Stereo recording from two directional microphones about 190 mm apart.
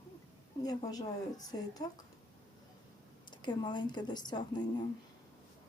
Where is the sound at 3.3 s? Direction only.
25° left (ahead or behind).